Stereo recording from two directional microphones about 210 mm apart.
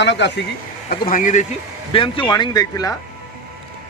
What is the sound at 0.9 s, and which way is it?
Speech, 40° left (ahead or behind).